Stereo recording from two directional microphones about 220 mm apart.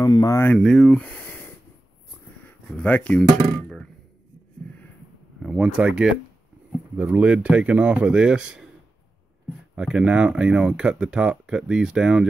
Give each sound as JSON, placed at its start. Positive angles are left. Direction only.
{"t": 0.0, "sound": "speech", "side_deg": 15}
{"t": 0.6, "sound": "speech", "side_deg": 0}
{"t": 2.8, "sound": "speech", "side_deg": 5}
{"t": 3.4, "sound": "a sound", "side_deg": 0}
{"t": 5.4, "sound": "speech", "side_deg": -5}
{"t": 9.8, "sound": "speech", "side_deg": -5}